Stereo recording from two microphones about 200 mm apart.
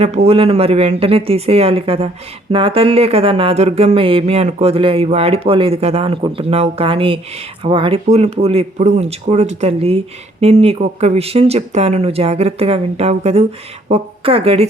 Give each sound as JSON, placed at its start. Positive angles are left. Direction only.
{"t": 0.0, "sound": "speech", "side_deg": -30}